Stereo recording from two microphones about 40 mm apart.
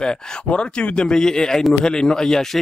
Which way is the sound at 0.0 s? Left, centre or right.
Left.